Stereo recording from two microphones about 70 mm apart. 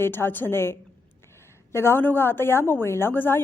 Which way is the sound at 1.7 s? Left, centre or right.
Left.